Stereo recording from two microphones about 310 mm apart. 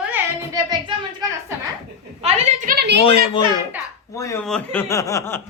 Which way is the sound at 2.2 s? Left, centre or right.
Centre.